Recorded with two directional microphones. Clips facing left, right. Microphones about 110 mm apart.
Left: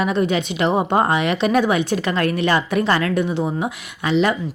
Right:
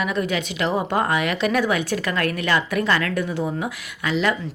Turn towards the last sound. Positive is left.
turn(degrees=25)  # may be behind; listen again after turning